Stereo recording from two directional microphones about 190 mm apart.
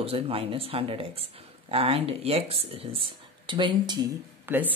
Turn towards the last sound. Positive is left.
turn(degrees=-10)  # may be behind; listen again after turning